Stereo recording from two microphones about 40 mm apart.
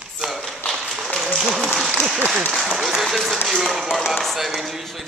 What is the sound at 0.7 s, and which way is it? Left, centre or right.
Applause, centre.